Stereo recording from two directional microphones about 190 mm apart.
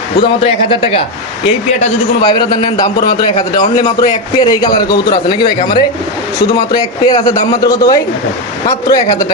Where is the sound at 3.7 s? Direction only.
20° left (ahead or behind).